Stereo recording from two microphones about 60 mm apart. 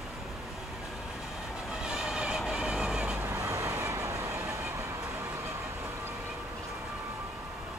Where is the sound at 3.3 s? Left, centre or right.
Right.